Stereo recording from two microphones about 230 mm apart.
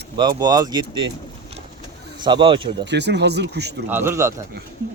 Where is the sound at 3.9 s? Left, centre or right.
Centre.